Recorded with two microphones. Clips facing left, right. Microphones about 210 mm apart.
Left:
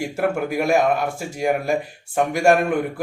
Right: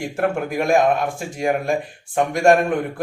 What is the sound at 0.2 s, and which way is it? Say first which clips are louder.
Speech: right 1 dB; 5° left (ahead or behind).